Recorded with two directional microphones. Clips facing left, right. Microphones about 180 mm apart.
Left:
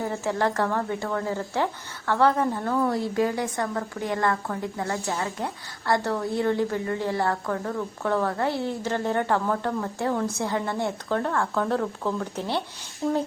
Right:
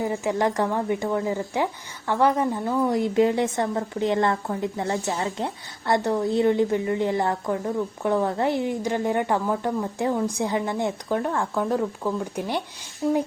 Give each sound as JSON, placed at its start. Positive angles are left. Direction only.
{"t": 0.0, "sound": "speech", "side_deg": -15}